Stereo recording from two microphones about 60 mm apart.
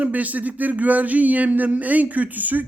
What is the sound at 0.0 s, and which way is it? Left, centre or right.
Speech, right.